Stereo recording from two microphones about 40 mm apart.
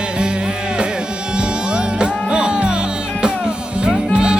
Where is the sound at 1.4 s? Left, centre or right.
Right.